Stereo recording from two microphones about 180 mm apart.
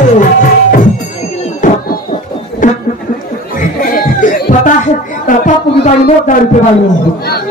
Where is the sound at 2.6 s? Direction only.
45° left (ahead or behind).